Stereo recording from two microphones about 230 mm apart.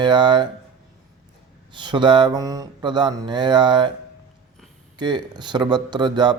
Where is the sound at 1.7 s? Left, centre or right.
Centre.